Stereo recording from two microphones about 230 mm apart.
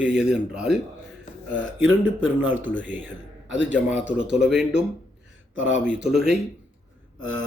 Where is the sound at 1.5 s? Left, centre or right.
Right.